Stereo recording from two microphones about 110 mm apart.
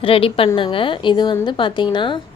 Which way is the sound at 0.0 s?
55° left (ahead or behind).